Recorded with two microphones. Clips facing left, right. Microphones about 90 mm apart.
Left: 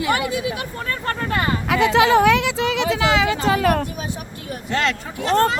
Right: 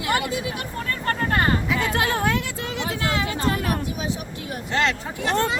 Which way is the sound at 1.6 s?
75° left (ahead or behind).